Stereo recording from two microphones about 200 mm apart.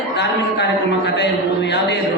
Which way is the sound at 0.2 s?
60° left (ahead or behind).